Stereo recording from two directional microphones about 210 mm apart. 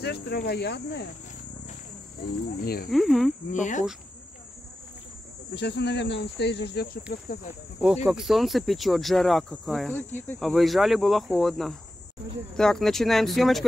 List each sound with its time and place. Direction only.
0.0 s speech: 50° left (ahead or behind)
2.2 s speech: 45° left (ahead or behind)
2.9 s speech: centre (ahead or behind)
3.5 s speech: 35° left (ahead or behind)
5.5 s speech: 55° left (ahead or behind)
7.8 s speech: 5° right (ahead or behind)